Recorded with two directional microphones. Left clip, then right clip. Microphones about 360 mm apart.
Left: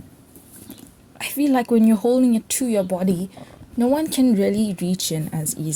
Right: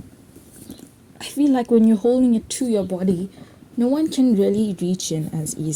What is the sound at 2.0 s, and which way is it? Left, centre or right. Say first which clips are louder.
Speech: even; left.